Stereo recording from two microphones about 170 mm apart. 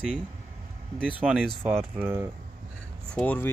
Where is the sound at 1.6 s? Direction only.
15° right (ahead or behind).